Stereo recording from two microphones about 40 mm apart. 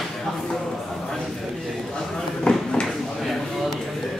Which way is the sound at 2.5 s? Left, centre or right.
Left.